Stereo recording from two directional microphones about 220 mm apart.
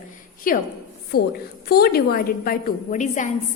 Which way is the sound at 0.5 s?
40° left (ahead or behind).